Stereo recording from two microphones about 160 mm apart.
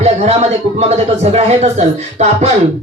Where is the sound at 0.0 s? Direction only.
40° right (ahead or behind).